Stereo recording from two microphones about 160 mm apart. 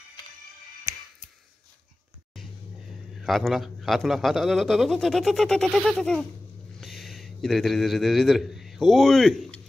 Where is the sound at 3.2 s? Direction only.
Centre (ahead or behind).